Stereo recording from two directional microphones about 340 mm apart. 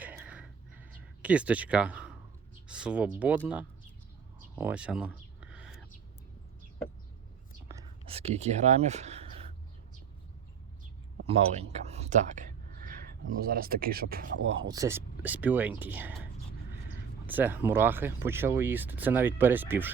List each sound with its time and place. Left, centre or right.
0.0 s a sound: centre
2.6 s speech: centre
4.5 s a sound: centre
7.7 s speech: centre
11.3 s speech: centre
14.7 s speech: centre